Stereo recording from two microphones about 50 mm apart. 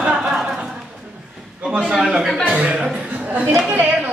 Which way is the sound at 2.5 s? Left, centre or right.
Right.